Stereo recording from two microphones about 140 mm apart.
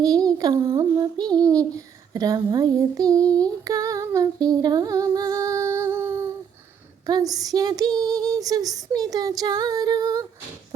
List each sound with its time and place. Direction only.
0.0 s child singing: 25° right (ahead or behind)
3.4 s female singing: 25° right (ahead or behind)
7.1 s child singing: 25° right (ahead or behind)